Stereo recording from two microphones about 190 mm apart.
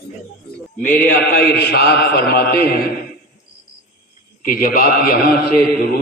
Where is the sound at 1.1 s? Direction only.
55° left (ahead or behind).